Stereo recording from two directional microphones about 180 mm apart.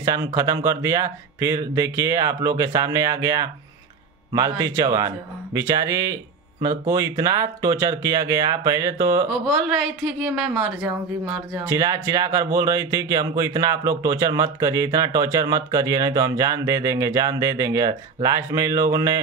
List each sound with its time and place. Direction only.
0.0 s speech: 15° right (ahead or behind)
9.5 s a woman's voice: centre (ahead or behind)
11.5 s speech: 15° right (ahead or behind)